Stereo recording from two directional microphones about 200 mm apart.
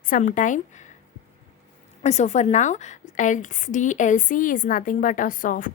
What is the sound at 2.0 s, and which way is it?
Speech, 35° left (ahead or behind).